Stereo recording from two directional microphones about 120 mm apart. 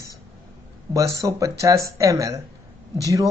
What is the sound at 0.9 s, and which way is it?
Speech, 25° right (ahead or behind).